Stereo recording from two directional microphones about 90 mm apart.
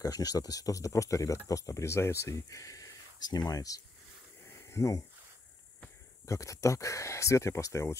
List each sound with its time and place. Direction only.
0.0 s speech: 45° left (ahead or behind)
6.2 s speech: 35° left (ahead or behind)